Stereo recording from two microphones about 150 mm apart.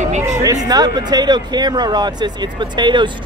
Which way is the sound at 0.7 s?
25° right (ahead or behind).